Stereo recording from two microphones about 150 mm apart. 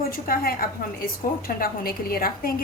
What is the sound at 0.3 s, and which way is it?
A woman's voice, 75° left (ahead or behind).